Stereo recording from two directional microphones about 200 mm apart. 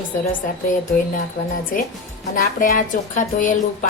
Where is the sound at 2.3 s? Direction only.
40° left (ahead or behind).